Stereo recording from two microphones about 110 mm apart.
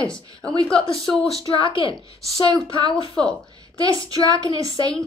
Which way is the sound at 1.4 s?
45° left (ahead or behind).